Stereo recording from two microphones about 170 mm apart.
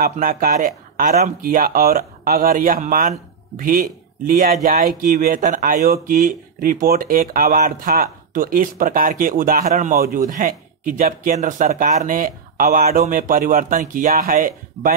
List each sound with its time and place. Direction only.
0.0 s speech: 55° right (ahead or behind)